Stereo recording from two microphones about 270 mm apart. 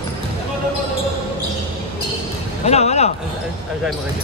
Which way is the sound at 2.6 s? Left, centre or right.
Left.